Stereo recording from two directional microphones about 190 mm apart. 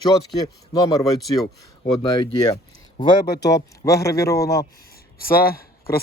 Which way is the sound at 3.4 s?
15° left (ahead or behind).